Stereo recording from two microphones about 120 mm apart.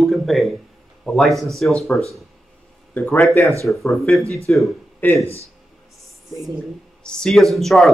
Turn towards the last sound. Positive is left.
turn(degrees=0)  # may be behind; listen again after turning